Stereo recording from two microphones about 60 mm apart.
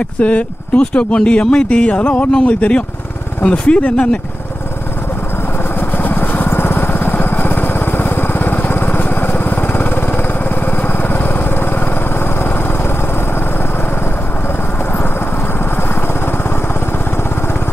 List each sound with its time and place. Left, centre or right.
0.2 s speech: left
5.8 s lawn mower: left
10.8 s vehicle: left